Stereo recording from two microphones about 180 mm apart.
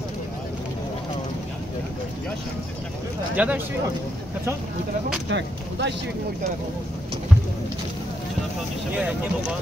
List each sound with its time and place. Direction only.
3.3 s speech: 10° right (ahead or behind)
5.3 s speech: 80° right
8.9 s speech: 5° right (ahead or behind)